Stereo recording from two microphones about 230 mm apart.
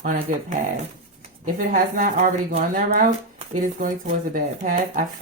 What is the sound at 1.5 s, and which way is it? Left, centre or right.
Speech, right.